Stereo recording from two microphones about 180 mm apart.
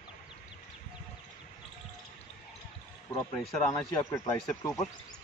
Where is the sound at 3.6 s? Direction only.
20° left (ahead or behind).